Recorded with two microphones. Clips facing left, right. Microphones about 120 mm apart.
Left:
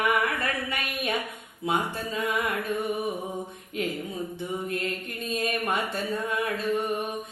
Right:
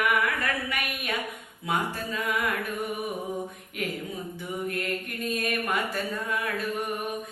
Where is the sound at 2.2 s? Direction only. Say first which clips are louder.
Even; 25° left (ahead or behind).